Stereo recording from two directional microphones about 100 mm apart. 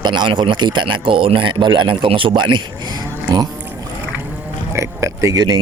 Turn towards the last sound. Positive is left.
turn(degrees=-40)  # may be behind; listen again after turning